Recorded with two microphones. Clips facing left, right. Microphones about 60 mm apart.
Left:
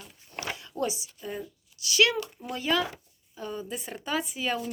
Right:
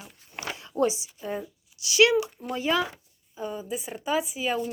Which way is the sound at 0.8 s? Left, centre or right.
Right.